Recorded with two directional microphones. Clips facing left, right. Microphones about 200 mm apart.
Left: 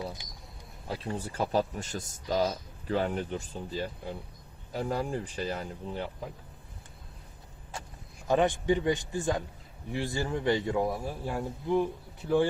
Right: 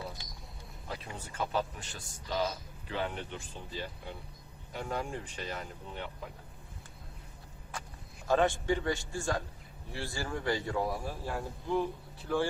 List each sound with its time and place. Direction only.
0.2 s a sound: 15° left (ahead or behind)
0.9 s a man's voice: 35° left (ahead or behind)
8.3 s a man's voice: 15° left (ahead or behind)